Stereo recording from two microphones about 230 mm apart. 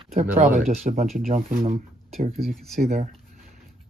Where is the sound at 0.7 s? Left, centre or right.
Right.